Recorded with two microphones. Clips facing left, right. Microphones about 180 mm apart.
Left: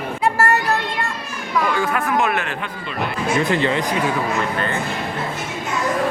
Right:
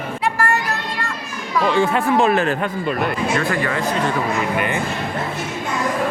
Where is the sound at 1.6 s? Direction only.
25° right (ahead or behind); by 2.9 s 40° right (ahead or behind).